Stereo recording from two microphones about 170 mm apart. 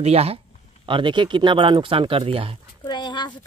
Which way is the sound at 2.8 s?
25° left (ahead or behind).